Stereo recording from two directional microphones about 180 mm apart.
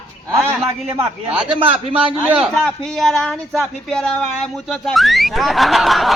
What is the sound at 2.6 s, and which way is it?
Speech, 5° left (ahead or behind).